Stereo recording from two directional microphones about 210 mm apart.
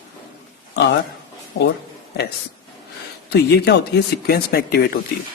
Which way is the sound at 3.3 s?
50° left (ahead or behind).